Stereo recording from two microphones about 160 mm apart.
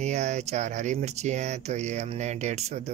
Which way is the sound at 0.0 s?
45° right (ahead or behind).